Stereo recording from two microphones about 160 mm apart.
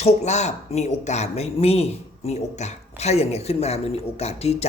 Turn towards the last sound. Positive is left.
turn(degrees=40)  # may be behind; listen again after turning